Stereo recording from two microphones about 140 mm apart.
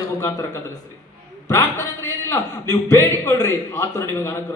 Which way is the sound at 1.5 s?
25° left (ahead or behind).